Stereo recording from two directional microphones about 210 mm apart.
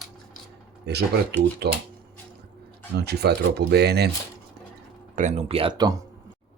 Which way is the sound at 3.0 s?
50° right (ahead or behind).